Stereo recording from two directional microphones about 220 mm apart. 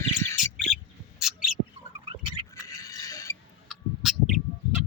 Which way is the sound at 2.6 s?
15° left (ahead or behind).